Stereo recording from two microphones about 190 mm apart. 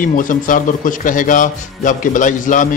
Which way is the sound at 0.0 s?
45° left (ahead or behind).